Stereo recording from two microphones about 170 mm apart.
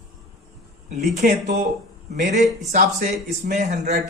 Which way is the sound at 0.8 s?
45° right (ahead or behind).